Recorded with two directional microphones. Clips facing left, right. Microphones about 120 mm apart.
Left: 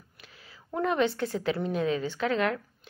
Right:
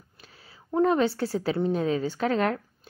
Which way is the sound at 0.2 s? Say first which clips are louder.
Right 1 dB; 35° right (ahead or behind).